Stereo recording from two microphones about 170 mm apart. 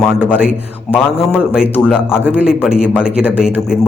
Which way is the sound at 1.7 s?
5° left (ahead or behind).